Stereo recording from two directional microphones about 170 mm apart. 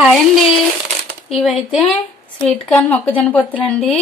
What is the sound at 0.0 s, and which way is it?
A woman's voice, centre (ahead or behind).